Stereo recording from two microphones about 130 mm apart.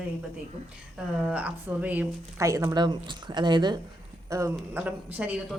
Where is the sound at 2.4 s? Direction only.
25° right (ahead or behind).